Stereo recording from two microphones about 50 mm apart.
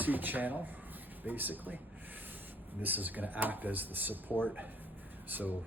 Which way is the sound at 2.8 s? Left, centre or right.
Right.